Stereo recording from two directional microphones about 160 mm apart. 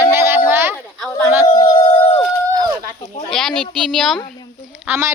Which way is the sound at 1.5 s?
25° left (ahead or behind).